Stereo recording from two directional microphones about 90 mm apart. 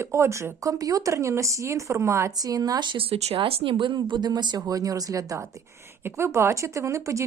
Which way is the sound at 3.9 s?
55° right (ahead or behind).